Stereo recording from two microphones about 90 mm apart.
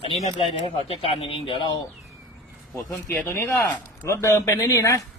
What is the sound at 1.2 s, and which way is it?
Speech, 90° left.